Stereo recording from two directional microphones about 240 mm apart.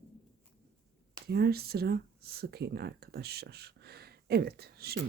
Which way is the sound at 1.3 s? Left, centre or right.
Right.